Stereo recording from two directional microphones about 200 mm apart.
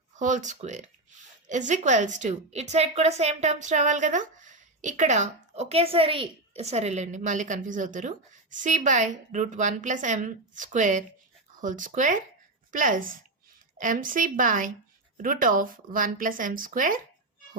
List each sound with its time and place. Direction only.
0.2 s a woman's voice: 40° right (ahead or behind)